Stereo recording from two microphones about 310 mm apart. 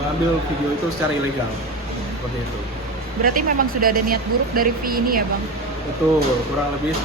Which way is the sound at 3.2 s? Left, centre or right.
Right.